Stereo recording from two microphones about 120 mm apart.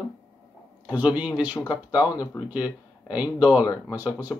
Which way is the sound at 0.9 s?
15° right (ahead or behind).